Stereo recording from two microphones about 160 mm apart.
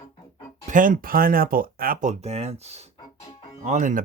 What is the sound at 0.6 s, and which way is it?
Speech, 55° right (ahead or behind).